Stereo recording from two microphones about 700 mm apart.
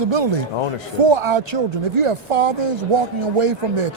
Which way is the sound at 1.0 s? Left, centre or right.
Right.